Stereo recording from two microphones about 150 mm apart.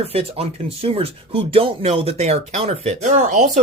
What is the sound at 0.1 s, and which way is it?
Speech, 40° right (ahead or behind).